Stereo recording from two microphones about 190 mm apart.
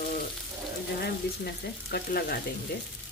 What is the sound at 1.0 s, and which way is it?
Speech, 55° left (ahead or behind).